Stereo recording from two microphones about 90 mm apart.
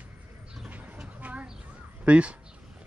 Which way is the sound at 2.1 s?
15° right (ahead or behind).